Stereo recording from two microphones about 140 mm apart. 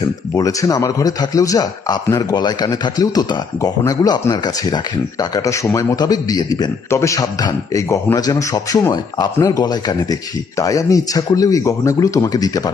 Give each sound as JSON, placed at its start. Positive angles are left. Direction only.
{"t": 0.3, "sound": "a man's voice", "side_deg": 25}